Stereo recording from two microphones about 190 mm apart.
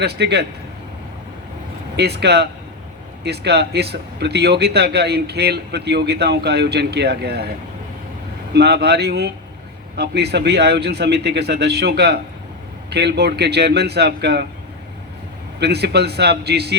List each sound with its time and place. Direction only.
0.0 s speech: 60° right (ahead or behind)
2.0 s speech: 60° right (ahead or behind)
8.5 s speech: 60° right (ahead or behind)
15.6 s speech: 60° right (ahead or behind)